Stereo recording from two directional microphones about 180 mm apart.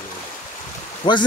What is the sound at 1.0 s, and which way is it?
Speech, 25° left (ahead or behind).